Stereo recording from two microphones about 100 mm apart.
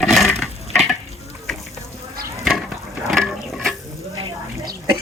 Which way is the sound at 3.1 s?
Centre (ahead or behind).